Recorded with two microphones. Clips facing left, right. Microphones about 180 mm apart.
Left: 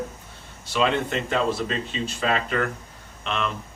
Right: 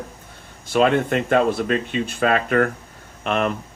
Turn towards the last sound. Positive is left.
turn(degrees=-50)  # may be behind; listen again after turning